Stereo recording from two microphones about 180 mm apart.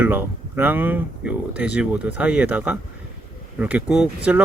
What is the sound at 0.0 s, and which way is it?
Speech, 10° right (ahead or behind).